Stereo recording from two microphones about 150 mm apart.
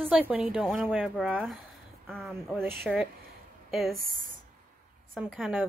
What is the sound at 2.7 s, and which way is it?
Speech, 15° right (ahead or behind).